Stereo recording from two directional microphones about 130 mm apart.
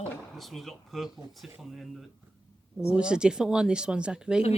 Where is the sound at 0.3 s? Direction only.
Centre (ahead or behind).